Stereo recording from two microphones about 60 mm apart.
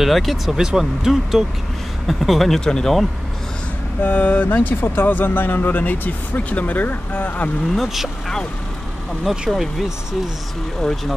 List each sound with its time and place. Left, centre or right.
0.0 s speech: centre
4.0 s speech: left
7.7 s speech: centre
9.5 s speech: centre
10.8 s speech: centre